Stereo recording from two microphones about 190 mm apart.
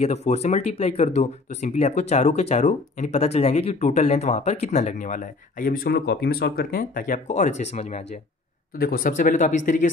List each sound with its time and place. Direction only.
0.0 s speech: 35° left (ahead or behind)
8.7 s speech: 50° left (ahead or behind)